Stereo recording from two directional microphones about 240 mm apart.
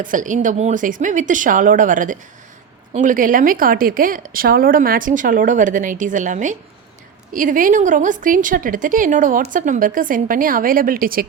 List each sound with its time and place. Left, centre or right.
0.0 s a woman's voice: right